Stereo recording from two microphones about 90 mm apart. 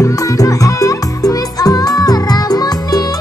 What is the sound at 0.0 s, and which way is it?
Music, 40° left (ahead or behind).